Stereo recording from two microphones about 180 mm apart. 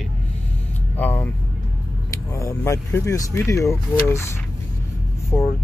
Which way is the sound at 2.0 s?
15° left (ahead or behind).